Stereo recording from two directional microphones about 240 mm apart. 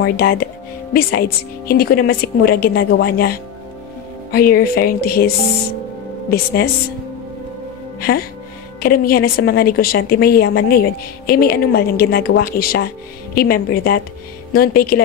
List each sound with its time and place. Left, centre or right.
0.0 s a woman's voice: left
6.3 s a woman's voice: left
8.0 s a woman's voice: left